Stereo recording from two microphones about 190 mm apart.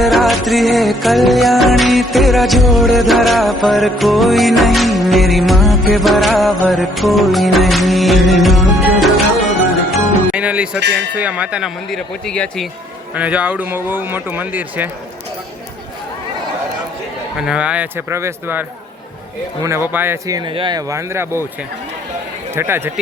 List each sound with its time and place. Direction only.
0.0 s music: centre (ahead or behind)
10.3 s music: 5° right (ahead or behind)
10.8 s speech: 65° right (ahead or behind)
11.2 s music: 5° right (ahead or behind)
13.1 s speech: 5° right (ahead or behind)
17.4 s speech: 5° right (ahead or behind)
19.6 s speech: 15° right (ahead or behind)
22.5 s speech: 10° right (ahead or behind)